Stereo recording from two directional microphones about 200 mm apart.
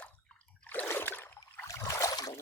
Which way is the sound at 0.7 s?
10° left (ahead or behind).